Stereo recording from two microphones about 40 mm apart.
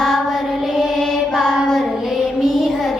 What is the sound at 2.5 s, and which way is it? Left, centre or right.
Child singing, centre.